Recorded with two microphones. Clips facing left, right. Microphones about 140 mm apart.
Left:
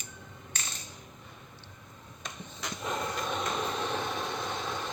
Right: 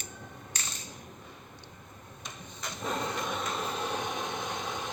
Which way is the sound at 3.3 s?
5° right (ahead or behind).